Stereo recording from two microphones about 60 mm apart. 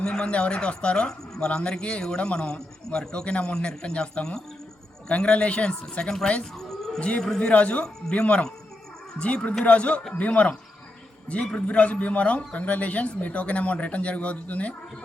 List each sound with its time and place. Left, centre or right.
0.0 s speech: centre